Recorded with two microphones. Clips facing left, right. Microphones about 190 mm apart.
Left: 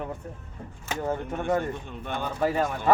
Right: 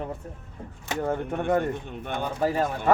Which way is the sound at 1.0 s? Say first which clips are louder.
Right 2 dB; 55° right (ahead or behind).